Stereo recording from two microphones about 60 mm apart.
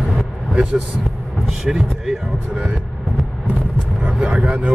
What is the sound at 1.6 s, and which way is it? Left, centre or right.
Speech, centre.